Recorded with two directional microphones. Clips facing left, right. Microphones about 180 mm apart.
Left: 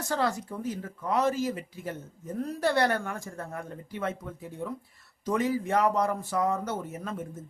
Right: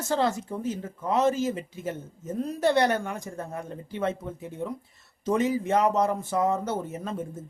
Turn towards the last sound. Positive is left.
turn(degrees=-30)  # may be behind; listen again after turning